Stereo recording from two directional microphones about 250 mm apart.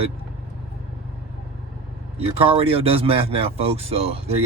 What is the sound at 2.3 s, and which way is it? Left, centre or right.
Speech, right.